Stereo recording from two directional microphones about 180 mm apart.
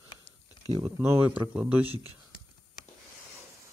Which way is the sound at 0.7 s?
20° right (ahead or behind).